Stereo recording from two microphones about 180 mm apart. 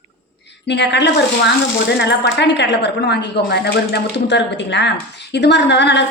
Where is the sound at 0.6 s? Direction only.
75° left (ahead or behind).